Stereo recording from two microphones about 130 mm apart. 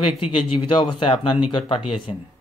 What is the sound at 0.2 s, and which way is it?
Speech, 45° left (ahead or behind).